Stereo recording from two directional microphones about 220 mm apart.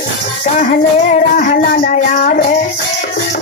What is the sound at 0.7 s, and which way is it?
Music, 35° left (ahead or behind).